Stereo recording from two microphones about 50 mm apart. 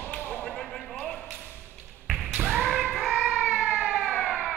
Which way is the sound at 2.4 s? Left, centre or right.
Centre.